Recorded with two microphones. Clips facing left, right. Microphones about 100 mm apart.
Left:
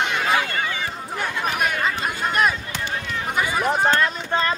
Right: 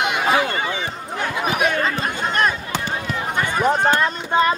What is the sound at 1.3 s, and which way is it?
Chatter, 10° right (ahead or behind).